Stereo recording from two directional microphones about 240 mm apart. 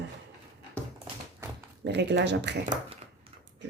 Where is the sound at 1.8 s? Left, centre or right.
Right.